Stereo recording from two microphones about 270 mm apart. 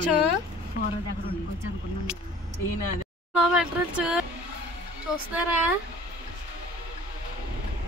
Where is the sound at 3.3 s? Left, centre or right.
Centre.